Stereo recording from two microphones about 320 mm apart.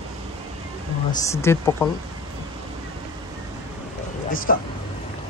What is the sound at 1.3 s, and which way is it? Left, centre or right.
Speech, centre.